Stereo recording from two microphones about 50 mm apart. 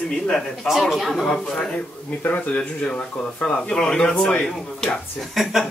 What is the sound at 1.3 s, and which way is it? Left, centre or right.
Speech, centre.